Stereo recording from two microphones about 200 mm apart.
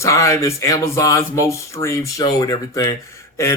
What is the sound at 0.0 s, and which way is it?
Speech, 15° left (ahead or behind).